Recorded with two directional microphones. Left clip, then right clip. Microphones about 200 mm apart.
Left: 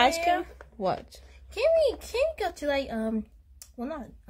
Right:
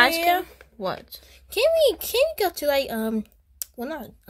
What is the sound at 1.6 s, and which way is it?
Speech, 50° right (ahead or behind).